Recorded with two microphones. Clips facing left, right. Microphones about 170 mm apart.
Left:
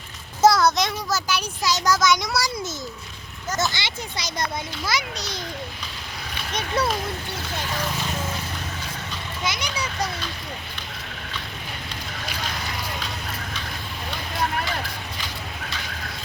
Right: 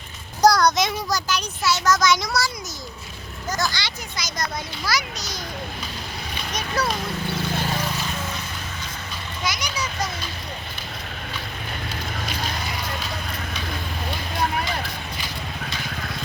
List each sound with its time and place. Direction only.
0.4 s a sound: centre (ahead or behind)
1.3 s speech: 15° left (ahead or behind)
2.0 s a child's voice: centre (ahead or behind)
3.6 s speech: 25° left (ahead or behind)
6.5 s speech: 30° left (ahead or behind)
9.4 s speech: 25° left (ahead or behind)